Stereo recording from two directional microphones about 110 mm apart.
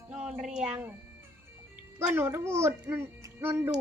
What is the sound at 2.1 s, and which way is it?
A child's voice, 20° right (ahead or behind).